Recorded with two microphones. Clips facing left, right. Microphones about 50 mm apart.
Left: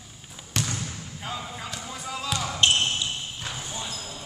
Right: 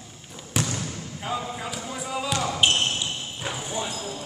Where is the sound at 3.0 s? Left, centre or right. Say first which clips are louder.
Right 1 dB; centre.